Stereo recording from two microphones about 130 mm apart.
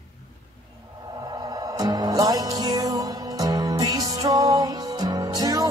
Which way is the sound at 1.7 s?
30° right (ahead or behind).